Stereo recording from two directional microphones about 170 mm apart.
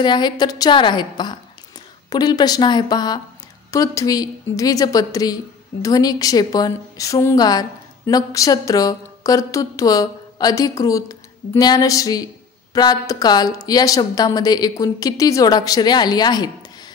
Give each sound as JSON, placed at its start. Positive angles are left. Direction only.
{"t": 0.0, "sound": "a woman's voice", "side_deg": 25}